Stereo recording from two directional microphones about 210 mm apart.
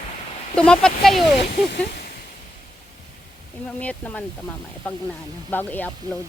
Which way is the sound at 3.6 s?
5° left (ahead or behind).